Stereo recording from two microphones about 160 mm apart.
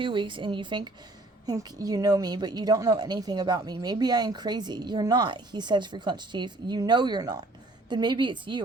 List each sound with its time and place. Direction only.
0.0 s a woman's voice: 30° right (ahead or behind)